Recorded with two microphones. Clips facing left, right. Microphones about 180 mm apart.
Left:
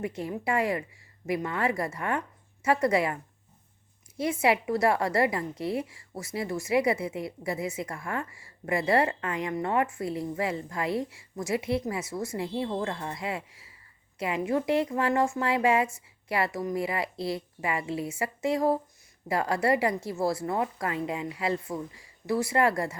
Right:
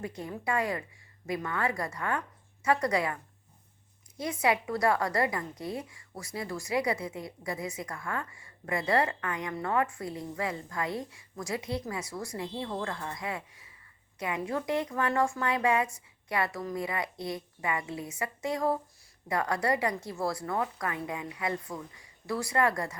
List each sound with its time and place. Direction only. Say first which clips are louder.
0.0 s a woman's voice: left 4 dB; 25° left (ahead or behind)
4.2 s a woman's voice: left 3 dB; 25° left (ahead or behind)